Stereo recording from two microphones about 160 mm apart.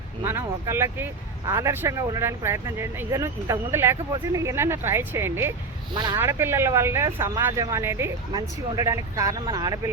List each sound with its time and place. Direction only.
0.3 s speech: 15° right (ahead or behind)
5.9 s speech: 25° right (ahead or behind)
6.1 s speech: 15° right (ahead or behind)